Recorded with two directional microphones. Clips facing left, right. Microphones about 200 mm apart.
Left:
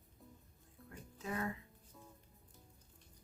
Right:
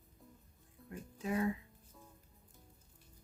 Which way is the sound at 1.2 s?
15° right (ahead or behind).